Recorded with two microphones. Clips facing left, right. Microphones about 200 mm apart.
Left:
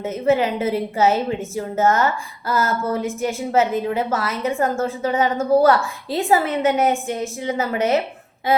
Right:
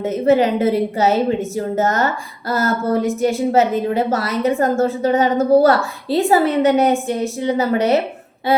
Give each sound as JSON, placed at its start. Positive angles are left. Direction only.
{"t": 0.0, "sound": "a woman's voice", "side_deg": -40}